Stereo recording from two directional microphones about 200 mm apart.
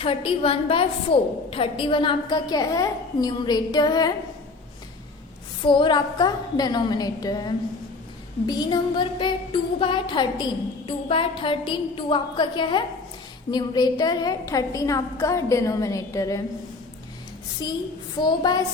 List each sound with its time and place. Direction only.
0.0 s music: 25° left (ahead or behind)
5.6 s music: 25° left (ahead or behind)
13.5 s a woman's voice: 20° left (ahead or behind)
17.6 s music: 20° left (ahead or behind)